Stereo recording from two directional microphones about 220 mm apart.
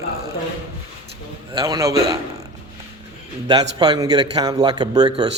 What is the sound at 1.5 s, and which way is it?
Speech, 15° right (ahead or behind).